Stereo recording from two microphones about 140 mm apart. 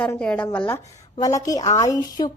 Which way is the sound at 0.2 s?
10° left (ahead or behind).